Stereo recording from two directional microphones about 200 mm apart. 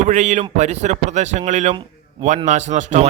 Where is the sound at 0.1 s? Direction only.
35° right (ahead or behind).